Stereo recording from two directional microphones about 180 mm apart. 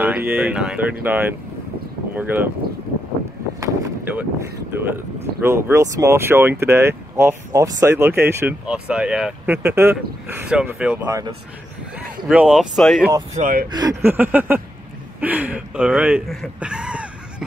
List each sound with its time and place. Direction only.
0.0 s speech: 10° right (ahead or behind)
3.6 s boat: 10° right (ahead or behind)
5.4 s speech: 15° right (ahead or behind)
12.3 s speech: 5° right (ahead or behind)
13.3 s speech: 50° right (ahead or behind)
13.7 s speech: 25° right (ahead or behind)
14.0 s speech: 10° right (ahead or behind)